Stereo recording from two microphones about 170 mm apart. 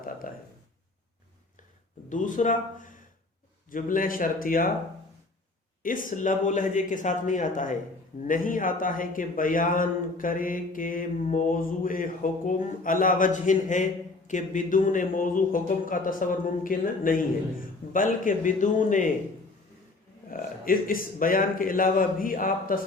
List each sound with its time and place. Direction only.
0.2 s a man's voice: 55° left (ahead or behind)
2.0 s a man's voice: 50° left (ahead or behind)
5.8 s a man's voice: 55° left (ahead or behind)
20.3 s a man's voice: 55° left (ahead or behind)